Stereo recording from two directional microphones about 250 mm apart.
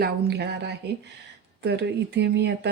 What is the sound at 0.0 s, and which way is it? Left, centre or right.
Speech, right.